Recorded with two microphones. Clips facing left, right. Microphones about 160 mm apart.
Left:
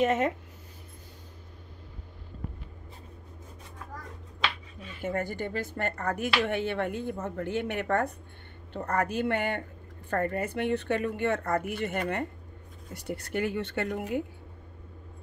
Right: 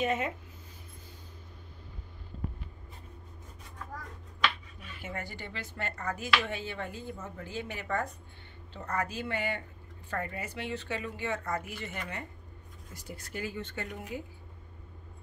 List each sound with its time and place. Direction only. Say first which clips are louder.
0.0 s speech: left 6 dB; 75° left (ahead or behind)
5.0 s speech: left 10 dB; 50° left (ahead or behind)
12.9 s speech: left 9 dB; 65° left (ahead or behind)